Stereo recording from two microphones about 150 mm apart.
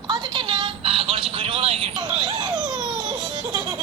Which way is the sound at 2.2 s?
25° right (ahead or behind).